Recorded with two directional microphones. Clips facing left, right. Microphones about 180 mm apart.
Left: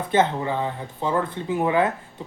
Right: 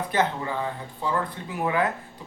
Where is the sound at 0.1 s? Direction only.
25° left (ahead or behind).